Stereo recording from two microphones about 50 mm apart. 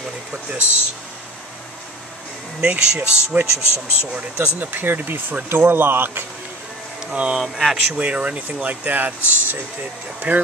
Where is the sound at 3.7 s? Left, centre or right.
Left.